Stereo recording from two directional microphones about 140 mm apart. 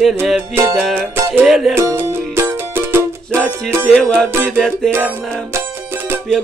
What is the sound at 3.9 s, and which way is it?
Music, 5° left (ahead or behind).